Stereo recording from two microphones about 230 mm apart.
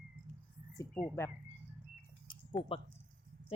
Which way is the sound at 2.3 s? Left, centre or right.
Left.